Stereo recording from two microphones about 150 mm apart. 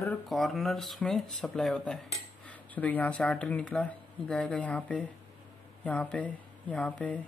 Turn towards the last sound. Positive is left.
turn(degrees=10)  # may be behind; listen again after turning